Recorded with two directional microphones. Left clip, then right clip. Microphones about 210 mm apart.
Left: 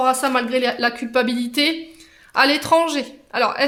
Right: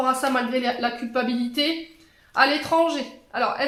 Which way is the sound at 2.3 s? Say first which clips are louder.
Left 4 dB; 50° left (ahead or behind).